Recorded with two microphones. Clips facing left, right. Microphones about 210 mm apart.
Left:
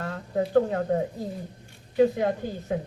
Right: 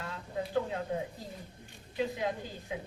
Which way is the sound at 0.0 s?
55° left (ahead or behind).